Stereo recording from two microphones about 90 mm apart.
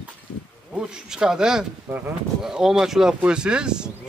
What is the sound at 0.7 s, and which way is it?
Speech, 10° right (ahead or behind).